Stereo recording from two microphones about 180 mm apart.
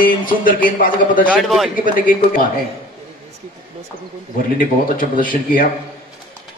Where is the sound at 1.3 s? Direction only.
Centre (ahead or behind).